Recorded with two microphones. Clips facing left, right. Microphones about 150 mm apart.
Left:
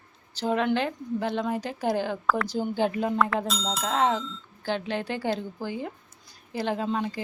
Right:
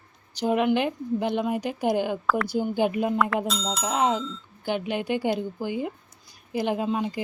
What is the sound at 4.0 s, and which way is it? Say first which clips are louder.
A woman's voice: right 1 dB; 15° right (ahead or behind).